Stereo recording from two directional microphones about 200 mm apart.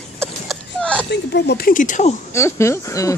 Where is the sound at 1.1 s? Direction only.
55° left (ahead or behind); by 2.1 s 40° left (ahead or behind).